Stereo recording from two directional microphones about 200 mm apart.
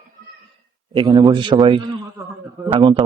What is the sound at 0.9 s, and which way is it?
A man's voice, 20° right (ahead or behind).